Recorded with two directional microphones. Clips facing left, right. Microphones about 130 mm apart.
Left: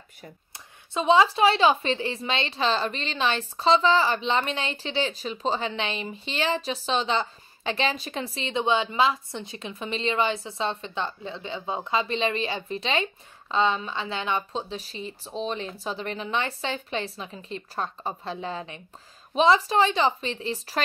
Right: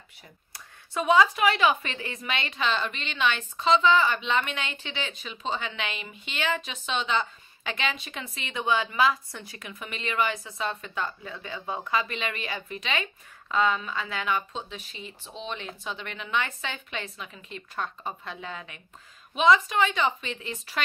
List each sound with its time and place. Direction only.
0.5 s speech: 25° left (ahead or behind)